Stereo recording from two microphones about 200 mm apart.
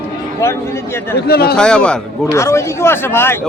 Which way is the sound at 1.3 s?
50° left (ahead or behind).